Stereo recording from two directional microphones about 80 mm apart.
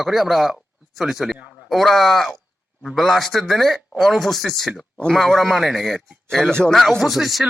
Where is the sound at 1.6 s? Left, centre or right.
Centre.